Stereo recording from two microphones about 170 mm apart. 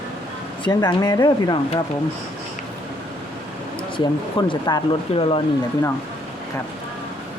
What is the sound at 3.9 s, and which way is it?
Speech, 25° left (ahead or behind).